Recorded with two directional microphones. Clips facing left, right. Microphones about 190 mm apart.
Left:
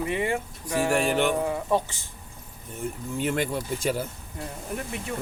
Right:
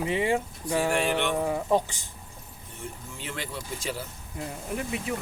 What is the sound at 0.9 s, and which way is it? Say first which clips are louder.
Speech: left 3 dB; 45° left (ahead or behind).